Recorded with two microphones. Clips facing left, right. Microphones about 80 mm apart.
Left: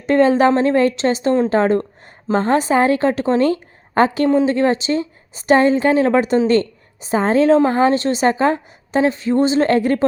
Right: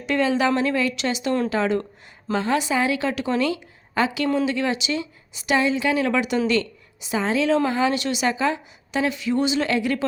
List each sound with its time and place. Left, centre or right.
0.0 s a woman's voice: left